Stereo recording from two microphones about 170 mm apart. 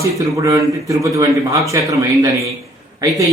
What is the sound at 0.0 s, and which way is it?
A man's voice, 20° right (ahead or behind).